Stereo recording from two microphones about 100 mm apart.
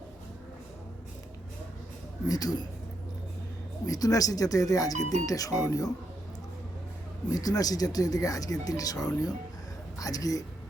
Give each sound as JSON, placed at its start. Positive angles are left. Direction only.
{"t": 2.2, "sound": "speech", "side_deg": 40}
{"t": 3.8, "sound": "speech", "side_deg": 35}
{"t": 7.3, "sound": "speech", "side_deg": 40}